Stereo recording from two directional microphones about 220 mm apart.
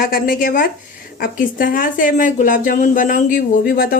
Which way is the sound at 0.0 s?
40° left (ahead or behind).